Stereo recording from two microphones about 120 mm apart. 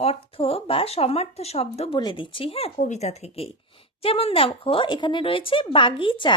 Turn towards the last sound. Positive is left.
turn(degrees=45)  # may be behind; listen again after turning